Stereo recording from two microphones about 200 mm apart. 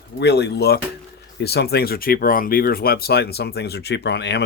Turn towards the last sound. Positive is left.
turn(degrees=55)  # may be behind; listen again after turning